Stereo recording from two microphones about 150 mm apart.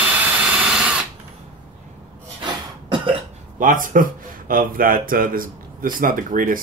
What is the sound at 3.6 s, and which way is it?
A man's voice, 60° right (ahead or behind).